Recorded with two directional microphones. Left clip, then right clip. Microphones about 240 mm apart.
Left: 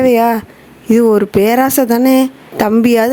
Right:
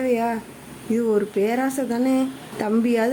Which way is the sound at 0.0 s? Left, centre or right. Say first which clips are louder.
Left 12 dB; left.